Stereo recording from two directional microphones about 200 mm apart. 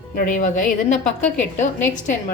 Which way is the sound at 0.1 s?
40° left (ahead or behind).